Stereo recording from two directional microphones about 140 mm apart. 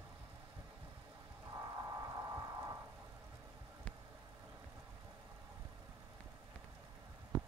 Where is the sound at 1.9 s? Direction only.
25° right (ahead or behind).